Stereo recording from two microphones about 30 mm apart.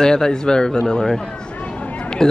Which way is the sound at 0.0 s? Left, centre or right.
Left.